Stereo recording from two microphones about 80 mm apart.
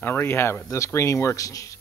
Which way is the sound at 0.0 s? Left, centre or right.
Left.